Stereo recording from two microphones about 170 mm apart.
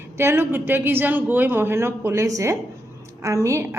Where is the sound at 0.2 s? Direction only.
15° right (ahead or behind).